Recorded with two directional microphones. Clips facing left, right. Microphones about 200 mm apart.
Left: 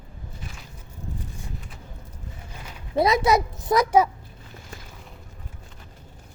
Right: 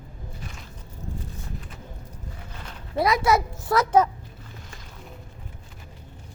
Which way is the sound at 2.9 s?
20° left (ahead or behind).